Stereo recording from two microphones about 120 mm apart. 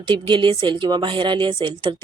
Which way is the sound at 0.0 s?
45° right (ahead or behind).